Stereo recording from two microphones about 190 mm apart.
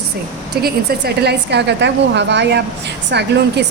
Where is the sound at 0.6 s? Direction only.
55° right (ahead or behind).